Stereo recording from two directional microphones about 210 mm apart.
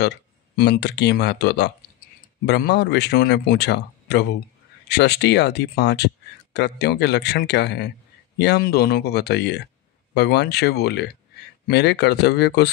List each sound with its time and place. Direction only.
0.0 s speech: 55° left (ahead or behind)